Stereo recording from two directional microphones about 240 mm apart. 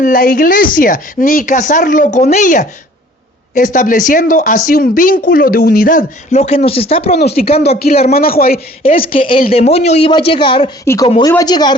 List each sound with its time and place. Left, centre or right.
0.0 s speech: left
7.2 s speech: left
8.8 s speech: left